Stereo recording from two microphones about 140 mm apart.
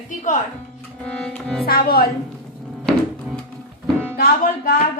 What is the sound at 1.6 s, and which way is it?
Speech, 90° left.